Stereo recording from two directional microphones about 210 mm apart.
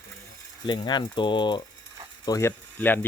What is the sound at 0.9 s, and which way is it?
Speech, 20° left (ahead or behind).